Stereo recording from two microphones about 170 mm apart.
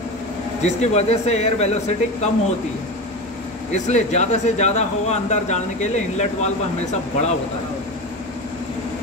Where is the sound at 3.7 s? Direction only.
45° left (ahead or behind).